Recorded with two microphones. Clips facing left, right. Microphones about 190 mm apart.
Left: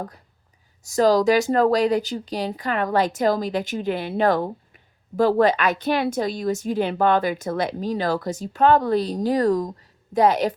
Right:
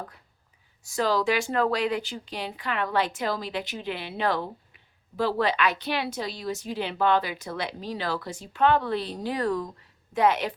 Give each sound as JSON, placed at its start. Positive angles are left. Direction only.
{"t": 0.9, "sound": "a woman's voice", "side_deg": 40}